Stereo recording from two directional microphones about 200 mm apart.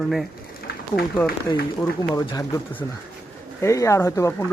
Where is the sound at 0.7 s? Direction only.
50° left (ahead or behind).